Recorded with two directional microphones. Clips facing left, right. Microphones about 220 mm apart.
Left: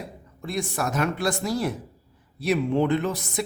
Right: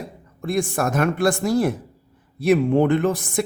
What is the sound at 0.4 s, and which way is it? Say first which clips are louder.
Speech: right 6 dB; 50° right (ahead or behind).